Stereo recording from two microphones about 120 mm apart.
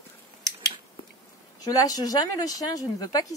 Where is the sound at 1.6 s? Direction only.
30° left (ahead or behind).